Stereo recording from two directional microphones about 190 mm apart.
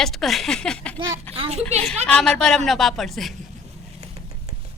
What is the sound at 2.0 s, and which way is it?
Speech, 5° left (ahead or behind).